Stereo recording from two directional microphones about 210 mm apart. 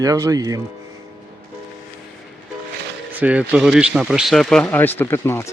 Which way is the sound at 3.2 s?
5° right (ahead or behind).